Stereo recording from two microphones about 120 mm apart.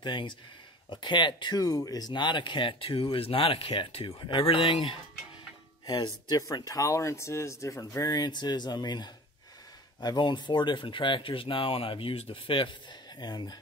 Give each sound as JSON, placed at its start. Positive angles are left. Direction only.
{"t": 0.0, "sound": "speech", "side_deg": 40}
{"t": 13.2, "sound": "speech", "side_deg": 35}